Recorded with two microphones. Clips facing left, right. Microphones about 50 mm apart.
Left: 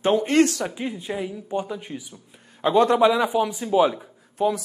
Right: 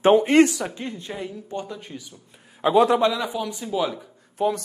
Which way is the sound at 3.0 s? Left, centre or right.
Centre.